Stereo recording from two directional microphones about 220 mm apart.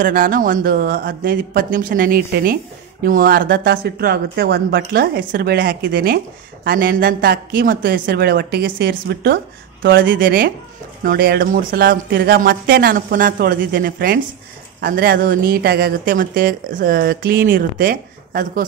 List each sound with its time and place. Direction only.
0.0 s speech: 40° right (ahead or behind)